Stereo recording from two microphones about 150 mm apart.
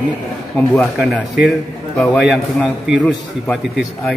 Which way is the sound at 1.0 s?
5° right (ahead or behind).